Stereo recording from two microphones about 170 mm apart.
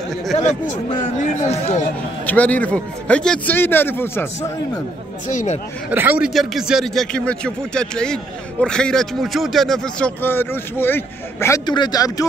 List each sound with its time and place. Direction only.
1.4 s speech: 45° left (ahead or behind)
2.2 s a man's voice: 10° left (ahead or behind)
5.3 s speech: 45° left (ahead or behind)
5.9 s a man's voice: 10° right (ahead or behind); by 12.3 s 20° left (ahead or behind)